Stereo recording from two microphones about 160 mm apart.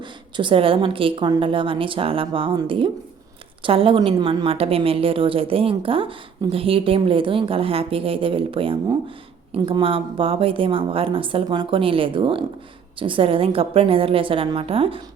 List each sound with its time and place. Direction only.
0.0 s a woman's voice: 30° right (ahead or behind)